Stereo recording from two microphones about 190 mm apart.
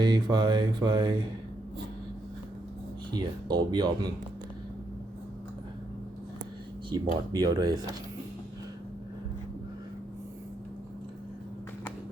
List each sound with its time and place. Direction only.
0.0 s mantra: 20° right (ahead or behind)
3.1 s mantra: 20° right (ahead or behind)
6.9 s mantra: 20° right (ahead or behind)